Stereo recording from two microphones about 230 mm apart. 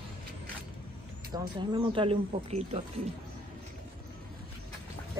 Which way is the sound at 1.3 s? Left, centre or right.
Centre.